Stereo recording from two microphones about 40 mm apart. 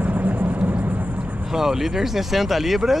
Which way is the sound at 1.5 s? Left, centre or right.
Centre.